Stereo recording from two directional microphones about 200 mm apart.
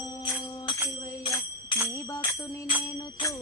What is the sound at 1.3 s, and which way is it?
Jingle bell, 15° left (ahead or behind).